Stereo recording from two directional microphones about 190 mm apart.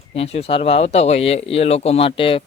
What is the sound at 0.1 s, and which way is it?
Speech, 30° left (ahead or behind).